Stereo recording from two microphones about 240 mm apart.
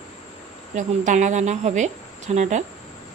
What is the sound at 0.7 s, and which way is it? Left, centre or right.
Speech, right.